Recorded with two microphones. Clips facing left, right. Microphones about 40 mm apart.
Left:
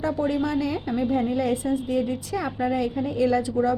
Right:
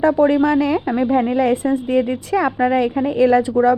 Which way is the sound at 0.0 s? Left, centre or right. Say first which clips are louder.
Right 10 dB; right.